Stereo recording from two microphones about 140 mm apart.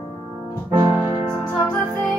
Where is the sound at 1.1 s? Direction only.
25° right (ahead or behind).